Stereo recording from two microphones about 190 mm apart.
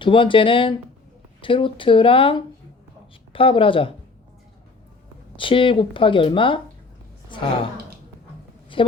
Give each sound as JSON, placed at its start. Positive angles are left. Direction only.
{"t": 0.0, "sound": "speech", "side_deg": 25}
{"t": 5.4, "sound": "a woman's voice", "side_deg": 25}
{"t": 8.7, "sound": "a woman's voice", "side_deg": 25}